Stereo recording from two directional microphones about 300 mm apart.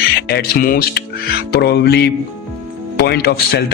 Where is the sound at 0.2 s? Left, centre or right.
Left.